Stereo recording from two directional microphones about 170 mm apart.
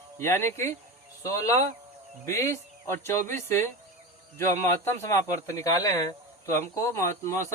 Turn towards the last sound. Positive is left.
turn(degrees=15)  # may be behind; listen again after turning